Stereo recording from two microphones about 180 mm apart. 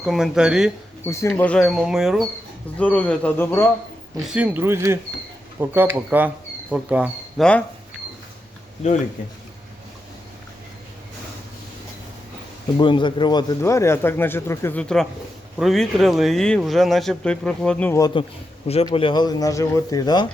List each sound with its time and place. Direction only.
0.0 s speech: 5° right (ahead or behind)
1.0 s speech: 15° left (ahead or behind)
1.4 s speech: 5° left (ahead or behind)
2.7 s speech: 10° left (ahead or behind)
4.2 s speech: 5° right (ahead or behind)
8.8 s speech: 40° left (ahead or behind)
12.7 s speech: 25° left (ahead or behind)
18.9 s speech: 25° left (ahead or behind)